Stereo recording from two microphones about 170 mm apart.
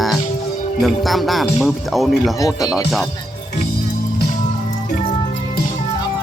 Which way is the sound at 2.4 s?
20° left (ahead or behind).